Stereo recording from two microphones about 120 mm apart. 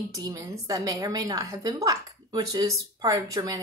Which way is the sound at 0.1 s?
30° right (ahead or behind).